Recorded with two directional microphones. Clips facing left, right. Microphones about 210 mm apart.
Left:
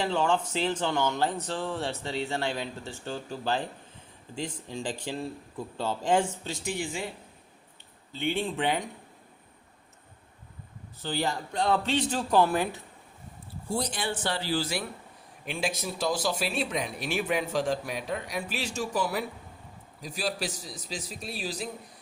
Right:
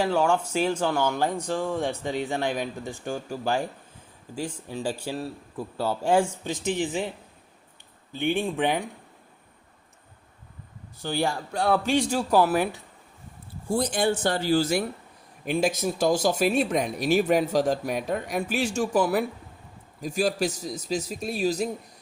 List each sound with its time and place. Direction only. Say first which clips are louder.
0.0 s speech: right 4 dB; 10° right (ahead or behind)
8.1 s speech: right 4 dB; 15° right (ahead or behind)
11.0 s speech: right 3 dB; 15° right (ahead or behind)
13.7 s speech: right 7 dB; 50° right (ahead or behind)